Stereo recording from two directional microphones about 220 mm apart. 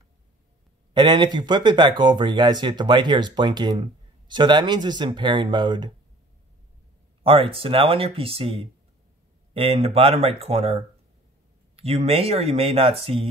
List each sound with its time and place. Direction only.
0.9 s speech: 20° right (ahead or behind)
7.2 s speech: 25° right (ahead or behind)